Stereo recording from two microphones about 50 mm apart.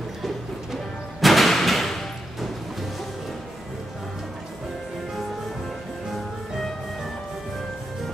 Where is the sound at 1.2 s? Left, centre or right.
Centre.